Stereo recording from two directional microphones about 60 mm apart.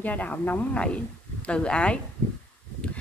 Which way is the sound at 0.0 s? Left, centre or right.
Left.